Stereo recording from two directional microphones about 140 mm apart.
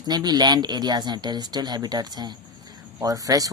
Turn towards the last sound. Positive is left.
turn(degrees=-25)  # may be behind; listen again after turning